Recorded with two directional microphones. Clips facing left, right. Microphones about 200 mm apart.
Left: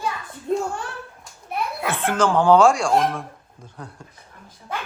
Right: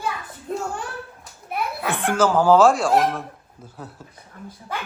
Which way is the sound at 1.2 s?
5° right (ahead or behind).